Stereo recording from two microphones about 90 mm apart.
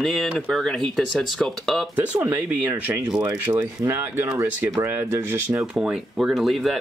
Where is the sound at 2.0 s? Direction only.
20° right (ahead or behind).